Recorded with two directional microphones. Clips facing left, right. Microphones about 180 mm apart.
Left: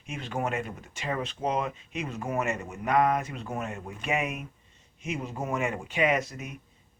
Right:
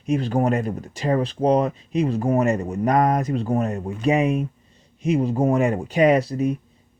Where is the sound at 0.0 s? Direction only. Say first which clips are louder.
Right 11 dB; 35° right (ahead or behind).